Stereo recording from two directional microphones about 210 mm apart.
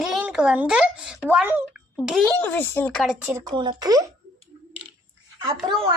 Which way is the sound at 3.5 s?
20° right (ahead or behind).